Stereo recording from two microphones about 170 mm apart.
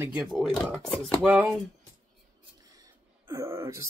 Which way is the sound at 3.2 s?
15° right (ahead or behind).